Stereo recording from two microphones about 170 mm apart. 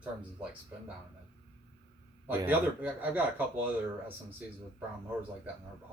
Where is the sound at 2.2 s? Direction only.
10° right (ahead or behind).